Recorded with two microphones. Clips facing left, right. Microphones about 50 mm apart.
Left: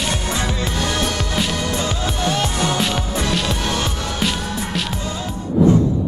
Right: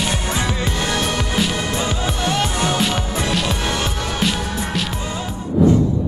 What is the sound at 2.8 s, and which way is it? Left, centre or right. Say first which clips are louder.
Music: even; centre.